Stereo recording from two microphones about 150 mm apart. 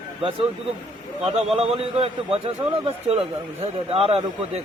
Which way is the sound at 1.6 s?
40° right (ahead or behind).